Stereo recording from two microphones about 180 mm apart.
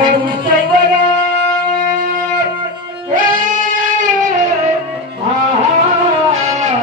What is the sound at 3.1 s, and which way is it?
Music, 50° right (ahead or behind).